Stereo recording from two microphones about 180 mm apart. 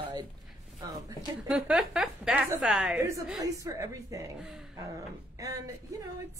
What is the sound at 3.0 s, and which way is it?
A woman's voice, 15° right (ahead or behind).